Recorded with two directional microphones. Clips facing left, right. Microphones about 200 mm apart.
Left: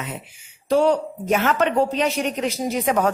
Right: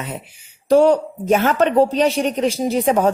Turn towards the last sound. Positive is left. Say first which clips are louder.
# right 4 dB
turn(degrees=-30)  # may be behind; listen again after turning